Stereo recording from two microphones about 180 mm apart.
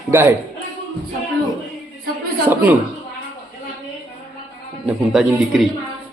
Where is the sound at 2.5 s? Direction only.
10° right (ahead or behind).